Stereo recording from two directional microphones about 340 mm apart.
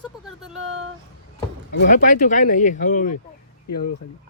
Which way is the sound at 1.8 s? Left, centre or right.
Left.